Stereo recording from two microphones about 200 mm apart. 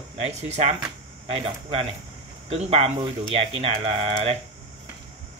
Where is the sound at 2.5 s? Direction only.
30° right (ahead or behind).